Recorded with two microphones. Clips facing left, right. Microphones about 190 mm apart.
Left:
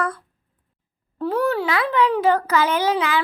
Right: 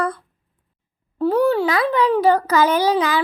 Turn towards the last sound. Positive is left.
turn(degrees=-35)  # may be behind; listen again after turning